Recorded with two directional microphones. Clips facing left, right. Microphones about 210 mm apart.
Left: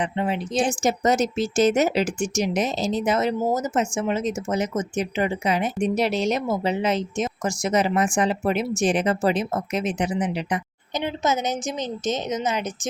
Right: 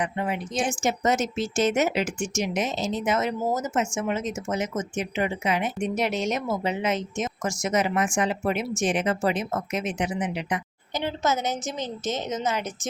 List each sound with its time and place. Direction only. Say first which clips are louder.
0.0 s speech: left 3 dB; 30° left (ahead or behind)
10.9 s a woman's voice: left 2 dB; 15° left (ahead or behind)